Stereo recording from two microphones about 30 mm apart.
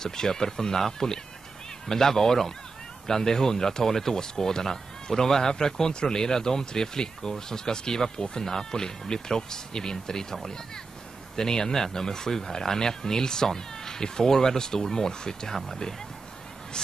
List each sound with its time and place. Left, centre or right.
0.0 s speech: centre
11.3 s speech: left
15.5 s speech: centre